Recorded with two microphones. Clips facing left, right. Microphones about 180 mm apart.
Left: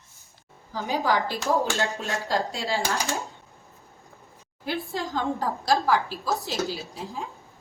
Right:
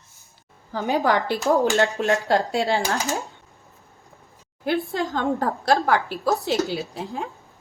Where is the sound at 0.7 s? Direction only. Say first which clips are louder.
Right 5 dB; 60° right (ahead or behind).